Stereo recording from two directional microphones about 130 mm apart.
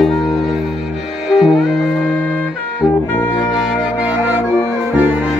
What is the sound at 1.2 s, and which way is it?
Music, 5° right (ahead or behind).